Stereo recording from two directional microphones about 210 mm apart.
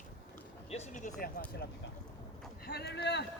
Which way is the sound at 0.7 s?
35° left (ahead or behind).